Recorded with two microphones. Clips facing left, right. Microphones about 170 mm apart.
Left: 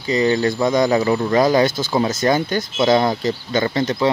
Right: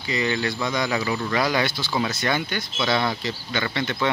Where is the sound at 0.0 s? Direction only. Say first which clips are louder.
Left 8 dB; 40° left (ahead or behind).